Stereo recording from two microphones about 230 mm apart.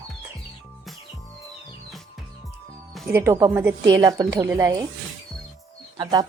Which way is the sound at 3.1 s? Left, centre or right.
Centre.